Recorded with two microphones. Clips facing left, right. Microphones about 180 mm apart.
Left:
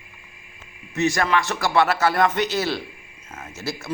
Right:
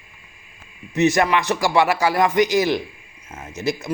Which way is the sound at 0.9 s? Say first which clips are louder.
Right 4 dB; 20° right (ahead or behind).